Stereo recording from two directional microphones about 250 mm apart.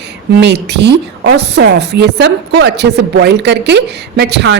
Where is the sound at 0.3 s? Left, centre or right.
Right.